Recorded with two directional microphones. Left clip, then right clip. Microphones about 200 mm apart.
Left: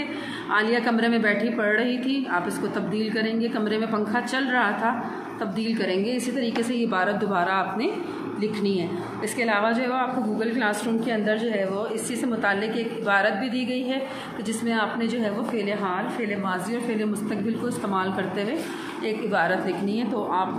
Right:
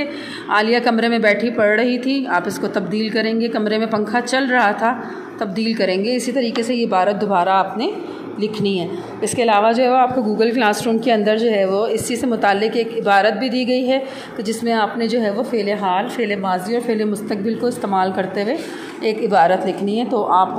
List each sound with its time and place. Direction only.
0.5 s a woman's voice: 35° right (ahead or behind)